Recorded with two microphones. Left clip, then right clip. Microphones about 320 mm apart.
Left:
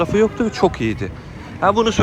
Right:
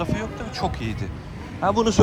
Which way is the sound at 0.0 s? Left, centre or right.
Centre.